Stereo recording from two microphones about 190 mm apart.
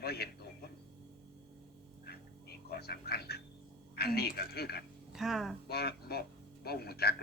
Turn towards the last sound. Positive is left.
turn(degrees=55)  # may be behind; listen again after turning